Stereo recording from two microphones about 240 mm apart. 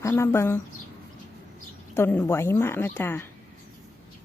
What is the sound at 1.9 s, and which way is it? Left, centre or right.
A woman's voice, centre.